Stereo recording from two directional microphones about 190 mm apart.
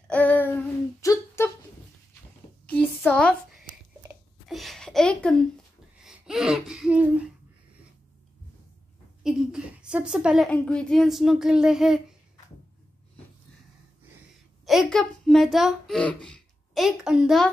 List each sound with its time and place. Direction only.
0.1 s a sound: 10° left (ahead or behind)
1.0 s humming: 15° left (ahead or behind)
2.7 s a sound: 5° left (ahead or behind)
6.0 s speech: 5° right (ahead or behind)
9.2 s a woman's voice: 5° right (ahead or behind)
14.7 s a child's voice: centre (ahead or behind)